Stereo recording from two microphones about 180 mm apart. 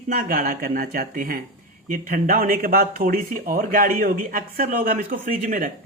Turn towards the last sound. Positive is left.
turn(degrees=-45)  # may be behind; listen again after turning